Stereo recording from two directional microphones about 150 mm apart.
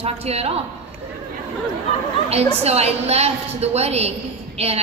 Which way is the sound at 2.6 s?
45° right (ahead or behind).